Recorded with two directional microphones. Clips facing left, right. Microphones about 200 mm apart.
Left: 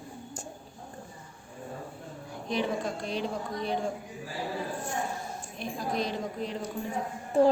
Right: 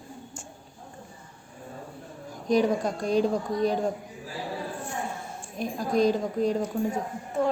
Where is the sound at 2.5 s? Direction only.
40° right (ahead or behind).